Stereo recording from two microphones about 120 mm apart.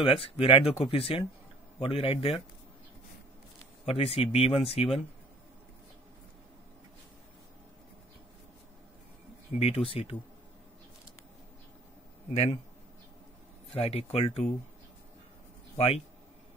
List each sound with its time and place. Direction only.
0.0 s speech: 50° left (ahead or behind)
3.8 s speech: 55° left (ahead or behind)
9.5 s speech: 55° left (ahead or behind)
13.7 s speech: 55° left (ahead or behind)